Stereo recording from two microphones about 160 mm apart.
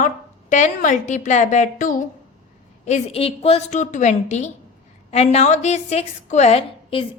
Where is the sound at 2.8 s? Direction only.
40° left (ahead or behind).